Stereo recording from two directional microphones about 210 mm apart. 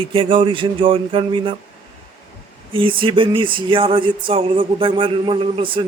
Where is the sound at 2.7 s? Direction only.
25° right (ahead or behind).